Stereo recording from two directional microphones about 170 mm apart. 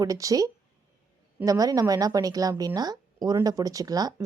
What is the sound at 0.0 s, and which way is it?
A woman's voice, 20° right (ahead or behind).